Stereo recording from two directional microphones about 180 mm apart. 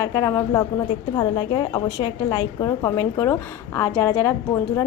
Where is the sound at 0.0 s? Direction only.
20° left (ahead or behind).